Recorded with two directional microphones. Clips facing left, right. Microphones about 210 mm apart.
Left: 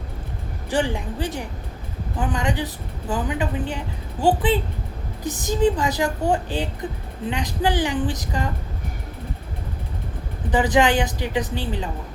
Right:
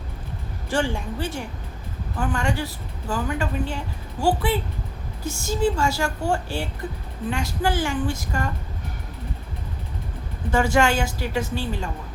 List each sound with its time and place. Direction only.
0.7 s a woman's voice: 15° left (ahead or behind)
10.5 s speech: 15° left (ahead or behind)